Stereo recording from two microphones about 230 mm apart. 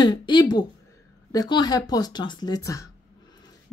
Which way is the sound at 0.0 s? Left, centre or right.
Centre.